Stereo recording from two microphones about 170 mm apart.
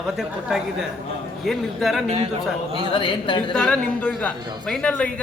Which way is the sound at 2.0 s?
35° right (ahead or behind).